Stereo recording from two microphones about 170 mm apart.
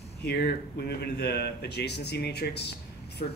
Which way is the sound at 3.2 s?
60° left (ahead or behind).